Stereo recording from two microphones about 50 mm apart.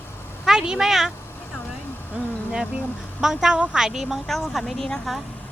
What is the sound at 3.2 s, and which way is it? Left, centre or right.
Speech, centre.